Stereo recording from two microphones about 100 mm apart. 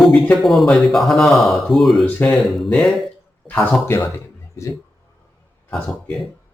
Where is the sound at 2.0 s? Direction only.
15° left (ahead or behind).